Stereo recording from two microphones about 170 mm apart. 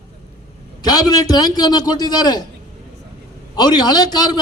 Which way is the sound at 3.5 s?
25° left (ahead or behind).